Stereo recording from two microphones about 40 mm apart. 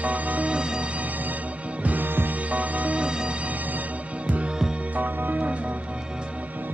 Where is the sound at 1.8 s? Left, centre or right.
Right.